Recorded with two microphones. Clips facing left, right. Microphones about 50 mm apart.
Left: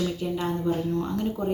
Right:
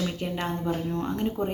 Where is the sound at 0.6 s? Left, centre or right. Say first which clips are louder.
Left 2 dB; right.